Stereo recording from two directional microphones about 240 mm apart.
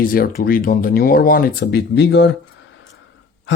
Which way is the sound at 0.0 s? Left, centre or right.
Left.